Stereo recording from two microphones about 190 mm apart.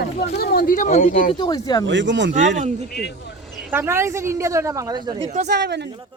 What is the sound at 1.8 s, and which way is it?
Speech, 70° right (ahead or behind).